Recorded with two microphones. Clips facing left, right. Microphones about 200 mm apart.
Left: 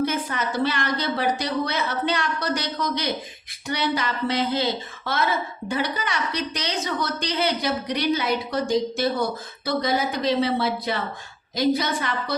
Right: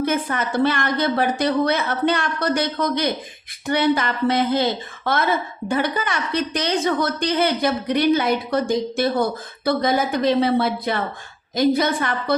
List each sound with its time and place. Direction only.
0.0 s a woman's voice: 55° right (ahead or behind)